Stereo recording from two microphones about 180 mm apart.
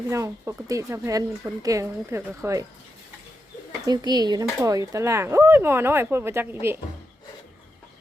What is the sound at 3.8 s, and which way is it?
Speech, 20° right (ahead or behind).